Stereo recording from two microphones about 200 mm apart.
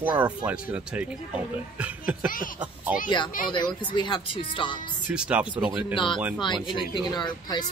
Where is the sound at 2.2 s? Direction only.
45° left (ahead or behind).